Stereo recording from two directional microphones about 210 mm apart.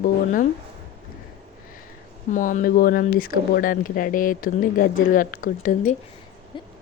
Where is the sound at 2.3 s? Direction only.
40° left (ahead or behind).